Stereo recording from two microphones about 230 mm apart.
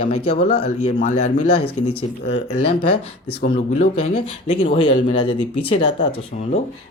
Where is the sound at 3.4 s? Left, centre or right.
Left.